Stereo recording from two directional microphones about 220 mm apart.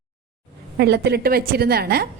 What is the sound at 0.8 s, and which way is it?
A woman's voice, 50° right (ahead or behind).